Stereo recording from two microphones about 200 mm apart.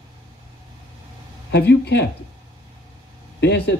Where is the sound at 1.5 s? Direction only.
60° left (ahead or behind).